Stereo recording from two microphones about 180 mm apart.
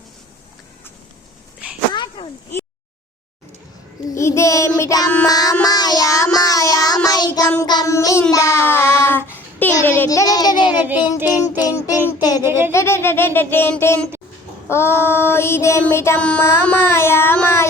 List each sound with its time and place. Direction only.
1.9 s a sound: 30° left (ahead or behind)
4.1 s child singing: 15° left (ahead or behind)
10.7 s child singing: 10° right (ahead or behind)
11.6 s child singing: 20° left (ahead or behind)
12.4 s speech: 15° right (ahead or behind)
12.7 s child singing: 15° left (ahead or behind)